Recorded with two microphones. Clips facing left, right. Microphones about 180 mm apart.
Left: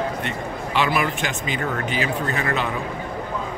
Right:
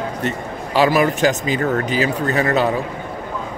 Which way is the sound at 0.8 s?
40° right (ahead or behind).